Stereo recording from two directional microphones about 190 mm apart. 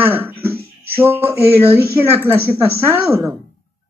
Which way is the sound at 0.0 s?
10° right (ahead or behind).